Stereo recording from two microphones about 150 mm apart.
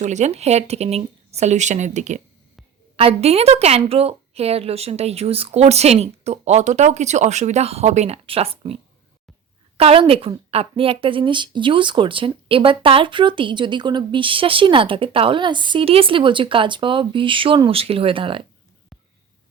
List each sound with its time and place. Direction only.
0.0 s a woman's voice: 50° right (ahead or behind)
2.9 s a woman's voice: 40° right (ahead or behind)
18.9 s a sound: centre (ahead or behind)